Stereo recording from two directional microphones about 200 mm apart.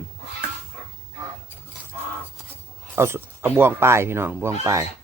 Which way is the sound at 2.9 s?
10° right (ahead or behind).